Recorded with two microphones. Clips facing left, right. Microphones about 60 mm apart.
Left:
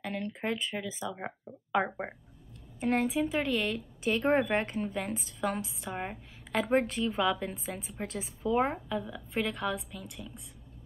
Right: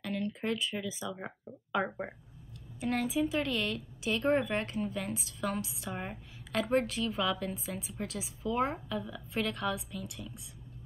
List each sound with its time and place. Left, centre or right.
0.0 s speech: left
2.8 s a woman's voice: left
5.9 s a woman's voice: centre
6.7 s speech: left
7.6 s a woman's voice: left
8.5 s a woman's voice: centre